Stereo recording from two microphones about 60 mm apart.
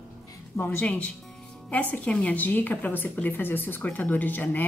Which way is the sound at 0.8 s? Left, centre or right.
Left.